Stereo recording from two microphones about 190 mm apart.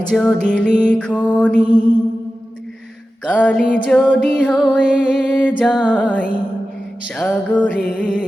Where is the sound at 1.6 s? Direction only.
25° left (ahead or behind).